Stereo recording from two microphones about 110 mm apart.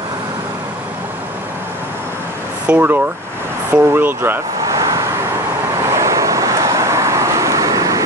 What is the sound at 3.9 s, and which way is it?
Speech, 20° right (ahead or behind).